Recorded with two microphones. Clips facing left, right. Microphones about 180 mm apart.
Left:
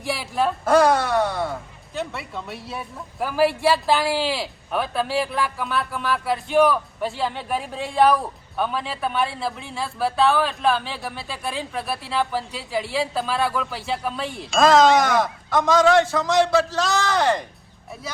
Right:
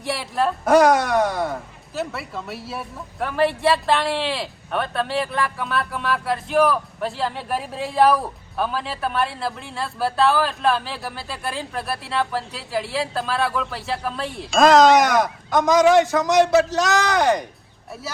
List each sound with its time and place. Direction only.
0.0 s speech: centre (ahead or behind)
0.6 s speech: 15° right (ahead or behind)
2.0 s speech: centre (ahead or behind)
15.2 s speech: 15° right (ahead or behind)